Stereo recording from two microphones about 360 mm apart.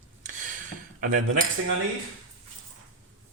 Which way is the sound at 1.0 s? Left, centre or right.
Right.